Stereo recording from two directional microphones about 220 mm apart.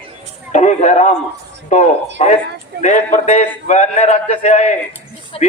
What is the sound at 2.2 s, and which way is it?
Speech, 30° left (ahead or behind).